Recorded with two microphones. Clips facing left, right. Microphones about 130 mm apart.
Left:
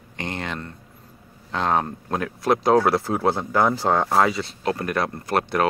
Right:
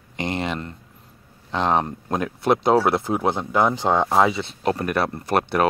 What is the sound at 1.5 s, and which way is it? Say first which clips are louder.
Speech: right 1 dB; 25° right (ahead or behind).